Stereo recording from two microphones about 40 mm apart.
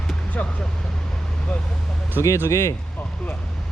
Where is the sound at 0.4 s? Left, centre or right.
Left.